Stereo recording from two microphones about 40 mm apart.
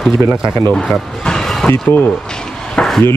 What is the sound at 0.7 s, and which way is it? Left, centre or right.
Speech, centre.